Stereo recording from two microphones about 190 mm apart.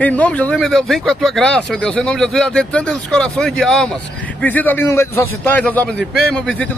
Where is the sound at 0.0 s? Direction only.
10° left (ahead or behind).